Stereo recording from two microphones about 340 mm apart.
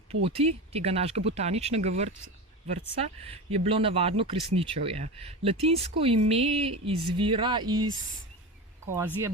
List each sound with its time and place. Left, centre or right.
0.1 s speech: centre
9.0 s speech: centre